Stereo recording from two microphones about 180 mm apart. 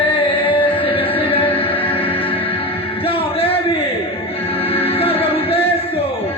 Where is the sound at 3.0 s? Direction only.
30° left (ahead or behind).